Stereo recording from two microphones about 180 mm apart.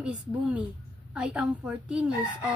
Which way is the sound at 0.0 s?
5° right (ahead or behind).